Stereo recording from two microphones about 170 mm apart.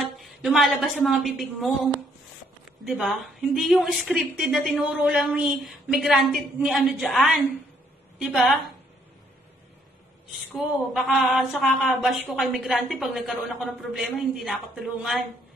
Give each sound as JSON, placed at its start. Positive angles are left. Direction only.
{"t": 0.0, "sound": "a woman's voice", "side_deg": 0}
{"t": 10.5, "sound": "speech", "side_deg": -5}